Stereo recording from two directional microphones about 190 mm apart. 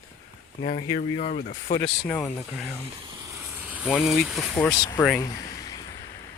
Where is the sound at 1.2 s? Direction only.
45° left (ahead or behind).